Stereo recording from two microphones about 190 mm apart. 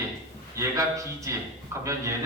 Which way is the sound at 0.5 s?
15° right (ahead or behind).